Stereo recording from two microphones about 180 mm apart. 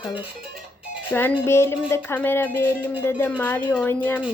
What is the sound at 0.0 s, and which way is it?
Speech, 10° right (ahead or behind).